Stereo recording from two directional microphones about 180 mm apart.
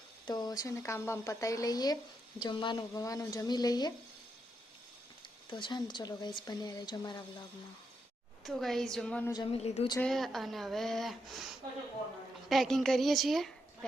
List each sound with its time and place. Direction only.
0.3 s a woman's voice: 25° left (ahead or behind)
5.5 s speech: 25° left (ahead or behind)
8.4 s a woman's voice: centre (ahead or behind)
9.3 s speech: 25° left (ahead or behind)
9.6 s speech: 35° left (ahead or behind)
10.0 s a woman's voice: centre (ahead or behind)